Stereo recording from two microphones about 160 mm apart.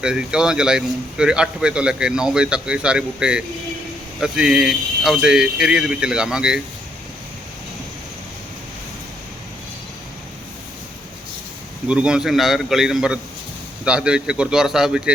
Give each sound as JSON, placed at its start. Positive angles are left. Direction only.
{"t": 0.0, "sound": "a man's voice", "side_deg": -5}
{"t": 11.9, "sound": "a man's voice", "side_deg": -5}